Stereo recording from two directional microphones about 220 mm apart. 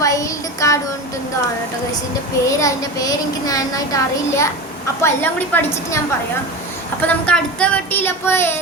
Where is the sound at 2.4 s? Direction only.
15° left (ahead or behind).